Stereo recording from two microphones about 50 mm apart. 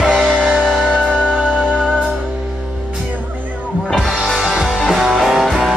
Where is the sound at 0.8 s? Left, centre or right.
Centre.